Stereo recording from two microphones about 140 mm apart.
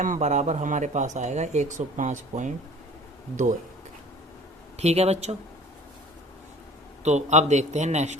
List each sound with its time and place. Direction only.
0.0 s speech: 60° right (ahead or behind)
4.8 s speech: 50° right (ahead or behind)
7.0 s speech: 55° right (ahead or behind)